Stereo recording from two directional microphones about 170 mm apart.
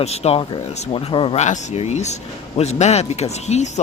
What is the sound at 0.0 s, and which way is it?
Speech, 40° left (ahead or behind).